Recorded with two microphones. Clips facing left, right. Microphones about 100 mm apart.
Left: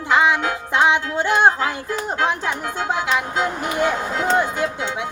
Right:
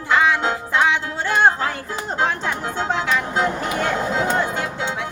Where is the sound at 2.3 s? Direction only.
15° left (ahead or behind).